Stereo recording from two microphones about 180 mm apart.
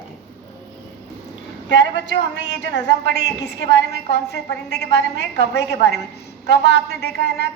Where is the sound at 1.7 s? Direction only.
85° left; by 7.1 s 65° left (ahead or behind).